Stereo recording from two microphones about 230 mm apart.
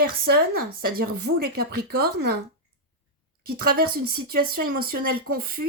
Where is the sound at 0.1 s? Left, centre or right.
Right.